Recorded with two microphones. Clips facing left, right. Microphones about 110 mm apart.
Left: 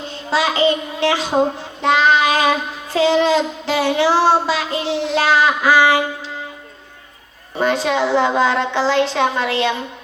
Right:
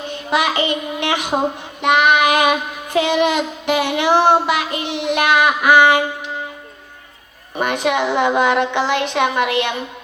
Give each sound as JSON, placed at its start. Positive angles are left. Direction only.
{"t": 0.1, "sound": "child singing", "side_deg": -15}
{"t": 7.6, "sound": "child singing", "side_deg": -15}